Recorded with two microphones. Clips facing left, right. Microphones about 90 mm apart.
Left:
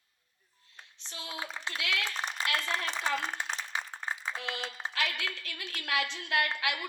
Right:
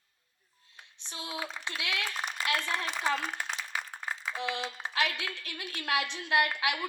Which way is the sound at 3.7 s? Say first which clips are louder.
Even; 25° left (ahead or behind).